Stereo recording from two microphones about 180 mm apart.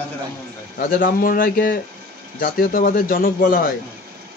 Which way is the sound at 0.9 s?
50° left (ahead or behind).